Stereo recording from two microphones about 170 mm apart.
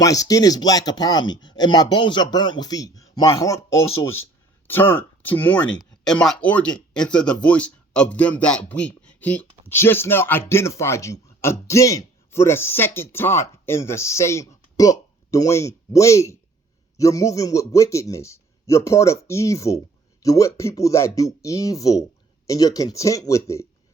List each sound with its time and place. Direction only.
0.0 s a man's voice: 20° left (ahead or behind)